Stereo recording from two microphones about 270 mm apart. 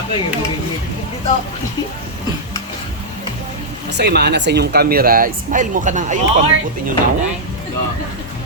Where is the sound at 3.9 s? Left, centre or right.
Right.